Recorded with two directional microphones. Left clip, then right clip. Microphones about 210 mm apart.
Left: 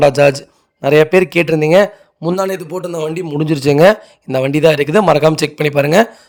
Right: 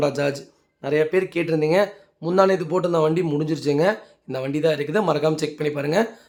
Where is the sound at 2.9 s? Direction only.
40° left (ahead or behind).